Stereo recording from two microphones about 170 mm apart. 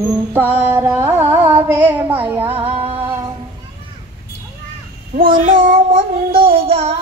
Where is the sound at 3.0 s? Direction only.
15° right (ahead or behind).